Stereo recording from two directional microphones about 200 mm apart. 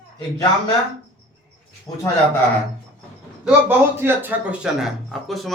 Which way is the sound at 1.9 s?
15° left (ahead or behind).